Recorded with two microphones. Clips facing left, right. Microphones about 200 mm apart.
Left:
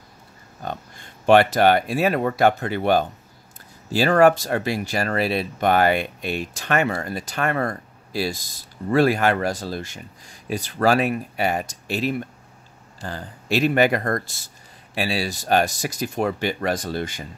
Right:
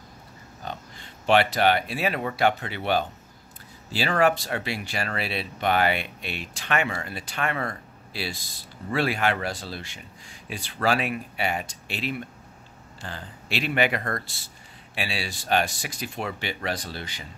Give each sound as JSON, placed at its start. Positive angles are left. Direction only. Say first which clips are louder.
{"t": 0.6, "sound": "speech", "louder": "left 5 dB", "side_deg": 50}